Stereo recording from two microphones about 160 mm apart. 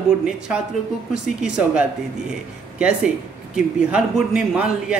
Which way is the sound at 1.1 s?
5° right (ahead or behind).